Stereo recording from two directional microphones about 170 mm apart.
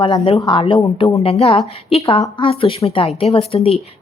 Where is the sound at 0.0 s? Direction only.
30° left (ahead or behind).